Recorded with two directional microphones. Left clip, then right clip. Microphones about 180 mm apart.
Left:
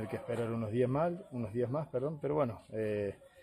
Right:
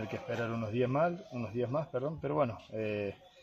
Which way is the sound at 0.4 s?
15° left (ahead or behind).